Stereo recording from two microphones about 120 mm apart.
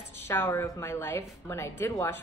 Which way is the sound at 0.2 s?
15° left (ahead or behind).